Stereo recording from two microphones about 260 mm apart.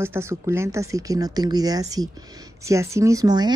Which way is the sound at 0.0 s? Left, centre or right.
Centre.